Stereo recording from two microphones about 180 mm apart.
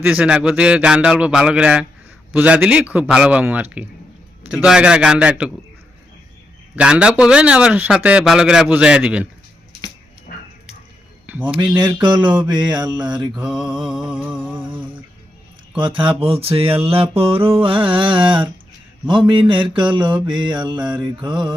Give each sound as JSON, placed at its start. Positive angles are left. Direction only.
{"t": 0.0, "sound": "a man's voice", "side_deg": -10}
{"t": 6.7, "sound": "a man's voice", "side_deg": -5}
{"t": 11.3, "sound": "speech", "side_deg": -10}
{"t": 12.0, "sound": "mantra", "side_deg": -25}
{"t": 13.3, "sound": "a man's voice", "side_deg": -5}
{"t": 15.7, "sound": "mantra", "side_deg": -30}